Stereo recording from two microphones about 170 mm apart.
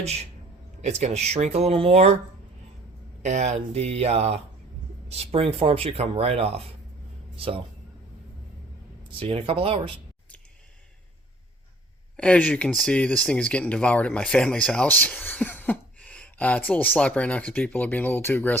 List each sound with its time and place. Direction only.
0.0 s speech: 40° right (ahead or behind)
3.2 s a man's voice: 45° right (ahead or behind)
9.0 s speech: 35° right (ahead or behind)
12.1 s speech: 5° left (ahead or behind)